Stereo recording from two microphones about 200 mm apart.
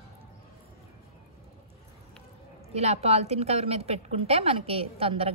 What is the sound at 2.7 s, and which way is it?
A woman's voice, 30° right (ahead or behind).